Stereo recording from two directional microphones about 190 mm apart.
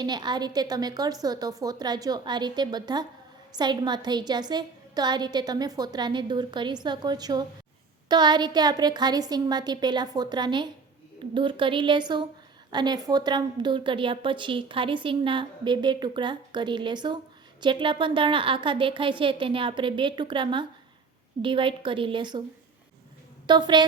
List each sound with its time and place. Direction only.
0.0 s a woman's voice: 20° right (ahead or behind)
23.5 s a woman's voice: 25° right (ahead or behind)